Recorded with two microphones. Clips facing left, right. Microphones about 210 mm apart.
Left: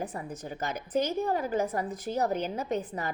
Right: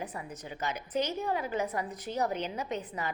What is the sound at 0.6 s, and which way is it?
A woman's voice, 50° left (ahead or behind).